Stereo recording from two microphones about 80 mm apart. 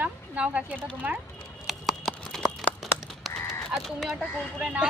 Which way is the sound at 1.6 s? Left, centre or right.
Centre.